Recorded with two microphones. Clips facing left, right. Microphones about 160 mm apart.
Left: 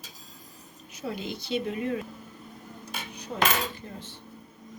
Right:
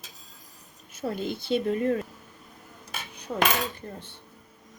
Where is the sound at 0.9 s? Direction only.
50° right (ahead or behind).